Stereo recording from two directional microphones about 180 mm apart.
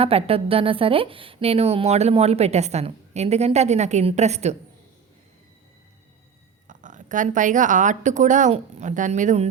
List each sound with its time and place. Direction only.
0.0 s speech: 35° right (ahead or behind)
6.7 s speech: 45° right (ahead or behind)